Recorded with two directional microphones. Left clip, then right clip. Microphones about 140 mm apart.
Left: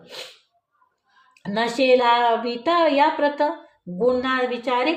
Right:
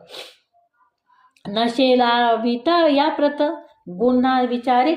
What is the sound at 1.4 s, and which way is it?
Speech, 20° right (ahead or behind).